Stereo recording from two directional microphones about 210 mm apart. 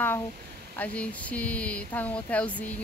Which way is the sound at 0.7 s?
5° left (ahead or behind).